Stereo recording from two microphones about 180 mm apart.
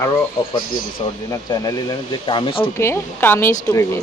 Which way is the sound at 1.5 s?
20° left (ahead or behind).